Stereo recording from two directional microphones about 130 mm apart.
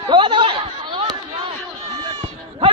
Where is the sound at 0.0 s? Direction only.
35° right (ahead or behind).